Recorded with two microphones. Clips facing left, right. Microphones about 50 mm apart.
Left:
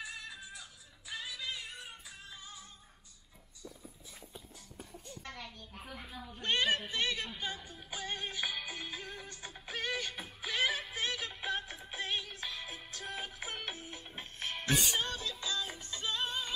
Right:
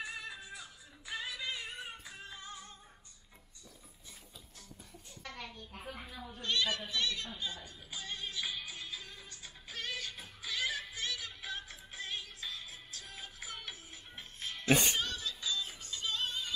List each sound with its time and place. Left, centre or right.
0.0 s music: centre
6.4 s speech: left
7.9 s music: left
14.7 s speech: right
15.0 s music: left